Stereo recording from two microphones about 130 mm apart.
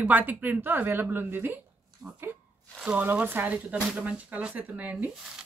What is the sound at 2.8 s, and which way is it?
Speech, 10° right (ahead or behind).